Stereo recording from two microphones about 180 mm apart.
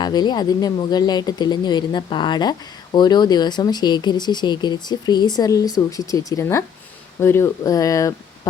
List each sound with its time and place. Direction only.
0.0 s speech: 25° left (ahead or behind)